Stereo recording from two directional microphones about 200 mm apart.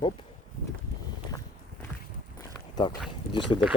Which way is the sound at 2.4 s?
20° left (ahead or behind).